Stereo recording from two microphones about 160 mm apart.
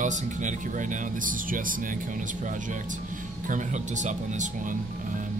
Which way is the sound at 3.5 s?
50° right (ahead or behind).